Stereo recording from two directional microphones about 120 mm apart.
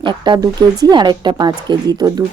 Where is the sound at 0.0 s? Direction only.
40° right (ahead or behind).